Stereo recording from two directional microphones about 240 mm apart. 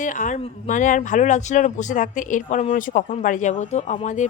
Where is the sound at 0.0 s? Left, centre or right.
Left.